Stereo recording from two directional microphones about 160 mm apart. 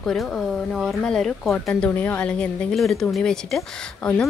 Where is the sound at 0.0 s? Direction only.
Centre (ahead or behind).